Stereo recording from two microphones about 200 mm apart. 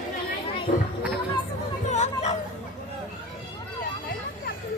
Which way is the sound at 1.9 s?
35° left (ahead or behind).